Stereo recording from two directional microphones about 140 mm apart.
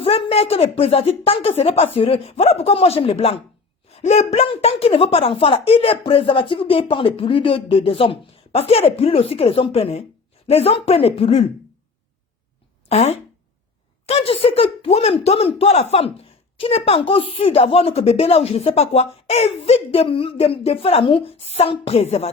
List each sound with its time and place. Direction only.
0.0 s speech: 40° left (ahead or behind)
3.8 s a sound: 50° left (ahead or behind)
4.4 s speech: 45° left (ahead or behind)
12.9 s speech: 50° left (ahead or behind)